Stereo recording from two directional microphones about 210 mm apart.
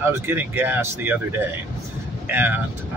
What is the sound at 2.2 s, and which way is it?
Speech, 10° right (ahead or behind).